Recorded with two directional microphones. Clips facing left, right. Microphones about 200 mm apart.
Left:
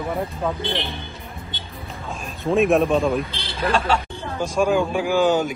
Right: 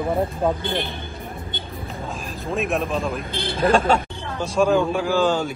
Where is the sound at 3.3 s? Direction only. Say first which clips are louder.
Right 4 dB; 50° right (ahead or behind).